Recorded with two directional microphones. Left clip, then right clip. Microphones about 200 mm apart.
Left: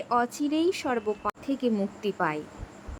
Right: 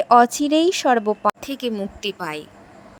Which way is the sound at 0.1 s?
40° right (ahead or behind).